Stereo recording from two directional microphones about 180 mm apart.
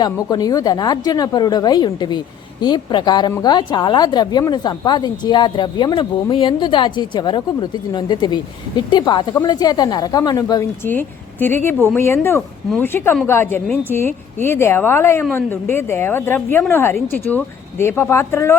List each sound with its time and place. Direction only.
0.0 s speech: 20° left (ahead or behind)